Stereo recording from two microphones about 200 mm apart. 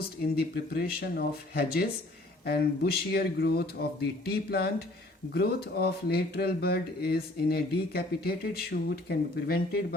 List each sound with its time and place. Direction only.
0.0 s speech: 50° left (ahead or behind)